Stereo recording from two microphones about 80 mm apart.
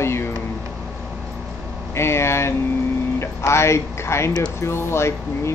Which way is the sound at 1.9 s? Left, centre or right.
Left.